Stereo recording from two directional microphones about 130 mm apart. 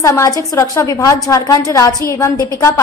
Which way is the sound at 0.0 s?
25° left (ahead or behind).